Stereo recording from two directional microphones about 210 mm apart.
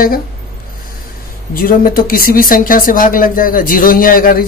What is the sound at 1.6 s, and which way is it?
Speech, 45° left (ahead or behind).